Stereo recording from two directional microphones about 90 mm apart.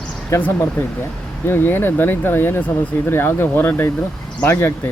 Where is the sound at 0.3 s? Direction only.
30° left (ahead or behind).